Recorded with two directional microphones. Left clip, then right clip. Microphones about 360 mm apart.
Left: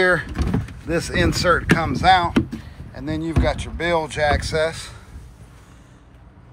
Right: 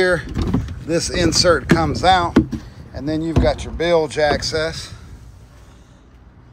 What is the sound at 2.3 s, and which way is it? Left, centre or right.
Speech, right.